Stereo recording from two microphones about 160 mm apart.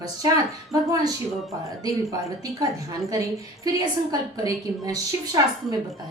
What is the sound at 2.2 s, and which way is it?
A woman's voice, 20° right (ahead or behind).